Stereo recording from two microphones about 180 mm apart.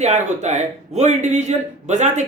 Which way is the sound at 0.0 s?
40° right (ahead or behind).